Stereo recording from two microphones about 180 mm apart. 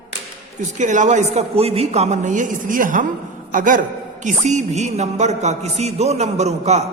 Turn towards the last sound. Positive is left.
turn(degrees=-40)  # may be behind; listen again after turning